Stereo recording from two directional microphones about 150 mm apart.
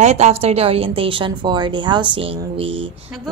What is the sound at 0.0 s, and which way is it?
Speech, 45° right (ahead or behind).